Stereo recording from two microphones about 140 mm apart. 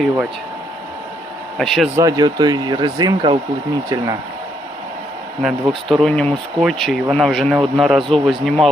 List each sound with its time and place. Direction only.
1.5 s speech: centre (ahead or behind)
2.0 s speech: 25° right (ahead or behind)
5.4 s speech: centre (ahead or behind)